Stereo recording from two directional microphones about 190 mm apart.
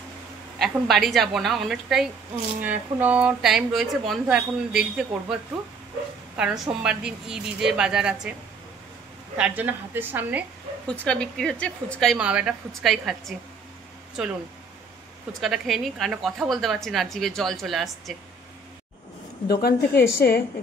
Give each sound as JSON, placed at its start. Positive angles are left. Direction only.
{"t": 0.6, "sound": "speech", "side_deg": 0}
{"t": 9.4, "sound": "a woman's voice", "side_deg": -10}
{"t": 10.9, "sound": "speech", "side_deg": 5}
{"t": 15.4, "sound": "speech", "side_deg": 0}
{"t": 19.4, "sound": "a woman's voice", "side_deg": 55}